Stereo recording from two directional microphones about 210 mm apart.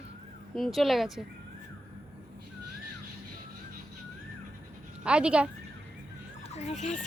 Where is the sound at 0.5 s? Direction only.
Centre (ahead or behind).